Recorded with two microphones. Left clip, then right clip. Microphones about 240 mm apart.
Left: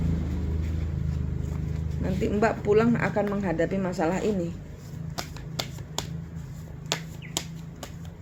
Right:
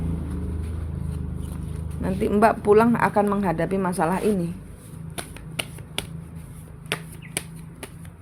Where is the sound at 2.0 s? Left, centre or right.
Right.